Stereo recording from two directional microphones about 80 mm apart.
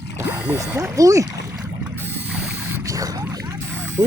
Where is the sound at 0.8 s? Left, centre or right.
Right.